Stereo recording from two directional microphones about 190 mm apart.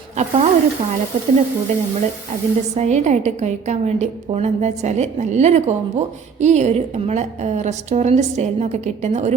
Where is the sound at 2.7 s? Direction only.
40° right (ahead or behind).